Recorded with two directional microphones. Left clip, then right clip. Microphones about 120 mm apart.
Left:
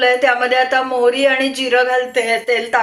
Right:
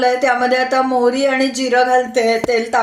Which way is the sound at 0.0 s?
40° right (ahead or behind).